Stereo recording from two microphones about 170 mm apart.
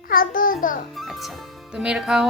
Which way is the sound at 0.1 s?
55° left (ahead or behind).